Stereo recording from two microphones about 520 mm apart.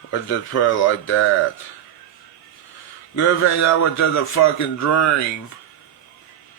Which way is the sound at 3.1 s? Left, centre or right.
Left.